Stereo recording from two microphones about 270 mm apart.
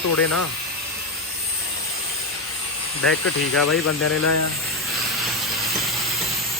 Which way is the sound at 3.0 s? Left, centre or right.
Left.